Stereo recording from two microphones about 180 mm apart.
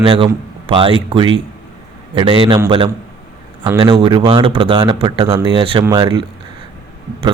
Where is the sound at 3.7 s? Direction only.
20° right (ahead or behind).